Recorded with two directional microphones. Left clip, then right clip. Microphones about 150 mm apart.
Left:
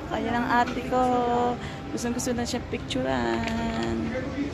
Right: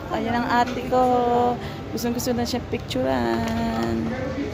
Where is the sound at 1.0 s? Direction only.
5° left (ahead or behind).